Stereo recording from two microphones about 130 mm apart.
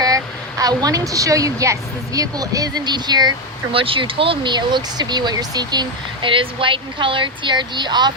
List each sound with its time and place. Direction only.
0.6 s a woman's voice: 30° right (ahead or behind)